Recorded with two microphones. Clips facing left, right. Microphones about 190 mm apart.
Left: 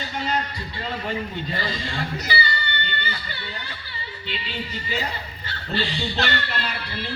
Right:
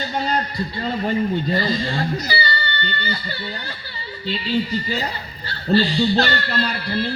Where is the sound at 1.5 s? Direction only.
35° right (ahead or behind).